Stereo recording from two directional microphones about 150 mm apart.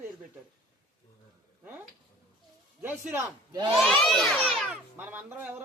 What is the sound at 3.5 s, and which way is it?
Speech, 30° right (ahead or behind).